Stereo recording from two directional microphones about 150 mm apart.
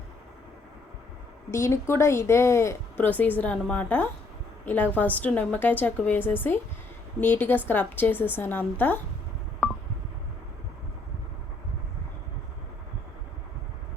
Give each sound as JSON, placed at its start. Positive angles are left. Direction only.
{"t": 1.5, "sound": "speech", "side_deg": 20}